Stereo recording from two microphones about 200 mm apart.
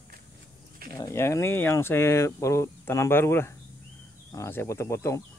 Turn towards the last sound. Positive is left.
turn(degrees=15)  # may be behind; listen again after turning